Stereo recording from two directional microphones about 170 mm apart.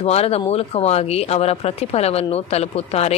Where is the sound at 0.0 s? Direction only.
35° left (ahead or behind).